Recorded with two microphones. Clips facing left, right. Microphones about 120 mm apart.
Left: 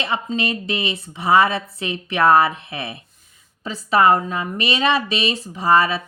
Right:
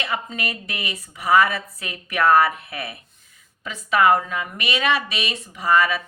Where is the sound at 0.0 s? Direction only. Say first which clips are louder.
Left 4 dB; 25° left (ahead or behind).